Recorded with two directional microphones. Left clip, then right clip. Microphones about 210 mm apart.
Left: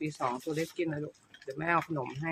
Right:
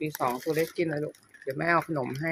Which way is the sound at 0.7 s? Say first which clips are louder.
Right 5 dB; 15° right (ahead or behind).